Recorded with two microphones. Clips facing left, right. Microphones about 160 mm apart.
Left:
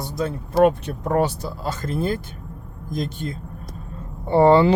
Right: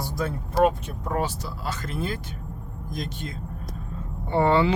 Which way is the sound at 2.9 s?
30° left (ahead or behind).